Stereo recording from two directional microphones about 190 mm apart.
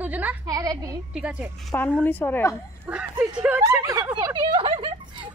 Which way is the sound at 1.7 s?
10° left (ahead or behind).